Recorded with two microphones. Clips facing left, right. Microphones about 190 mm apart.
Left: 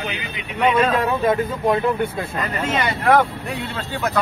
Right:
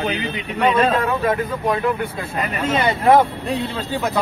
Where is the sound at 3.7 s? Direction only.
15° right (ahead or behind).